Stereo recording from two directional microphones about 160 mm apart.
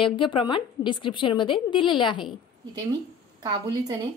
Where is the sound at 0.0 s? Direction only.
30° left (ahead or behind).